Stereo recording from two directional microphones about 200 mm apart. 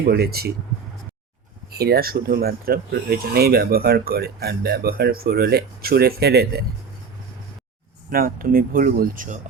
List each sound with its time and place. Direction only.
0.1 s speech: 50° right (ahead or behind)
1.7 s speech: 50° right (ahead or behind)
8.1 s speech: 45° right (ahead or behind)